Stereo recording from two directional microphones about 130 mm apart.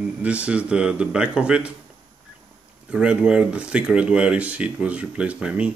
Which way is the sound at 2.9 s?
5° right (ahead or behind).